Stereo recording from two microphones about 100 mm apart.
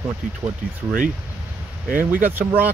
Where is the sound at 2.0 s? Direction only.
20° right (ahead or behind).